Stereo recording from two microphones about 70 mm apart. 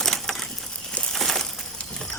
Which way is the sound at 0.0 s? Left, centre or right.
Centre.